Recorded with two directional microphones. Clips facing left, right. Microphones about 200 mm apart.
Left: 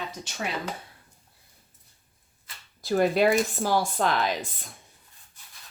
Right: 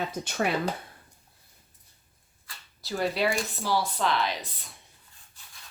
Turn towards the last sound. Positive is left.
turn(degrees=45)  # may be behind; listen again after turning